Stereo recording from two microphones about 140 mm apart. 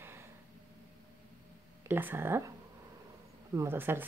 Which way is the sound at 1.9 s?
15° right (ahead or behind).